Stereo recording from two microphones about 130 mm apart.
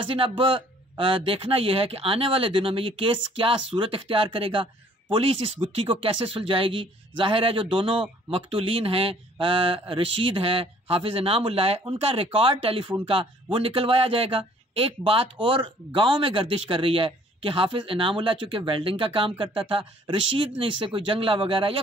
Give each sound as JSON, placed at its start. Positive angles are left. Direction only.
{"t": 0.0, "sound": "speech", "side_deg": -45}